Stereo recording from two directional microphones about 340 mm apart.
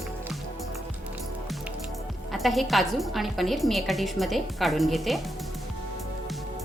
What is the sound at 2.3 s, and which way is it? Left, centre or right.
A woman's voice, centre.